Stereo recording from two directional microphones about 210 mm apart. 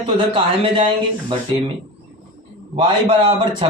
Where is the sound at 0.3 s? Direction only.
25° right (ahead or behind).